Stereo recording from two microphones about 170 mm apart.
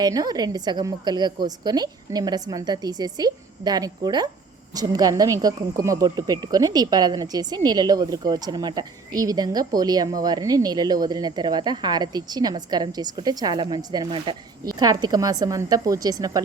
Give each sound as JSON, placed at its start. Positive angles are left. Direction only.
{"t": 0.0, "sound": "speech", "side_deg": -25}